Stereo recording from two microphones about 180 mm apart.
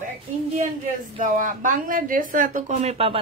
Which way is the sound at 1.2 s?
45° right (ahead or behind).